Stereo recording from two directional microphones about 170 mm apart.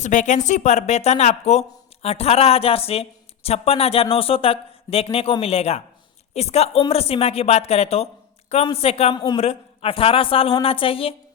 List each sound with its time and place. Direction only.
0.0 s speech: 45° left (ahead or behind)
9.1 s a man's voice: 25° left (ahead or behind)
9.4 s speech: 35° left (ahead or behind)